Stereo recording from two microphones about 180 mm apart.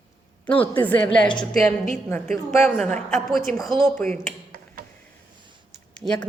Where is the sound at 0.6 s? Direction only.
10° left (ahead or behind).